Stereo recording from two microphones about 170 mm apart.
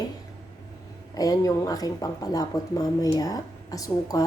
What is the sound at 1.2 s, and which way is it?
Speech, 20° left (ahead or behind).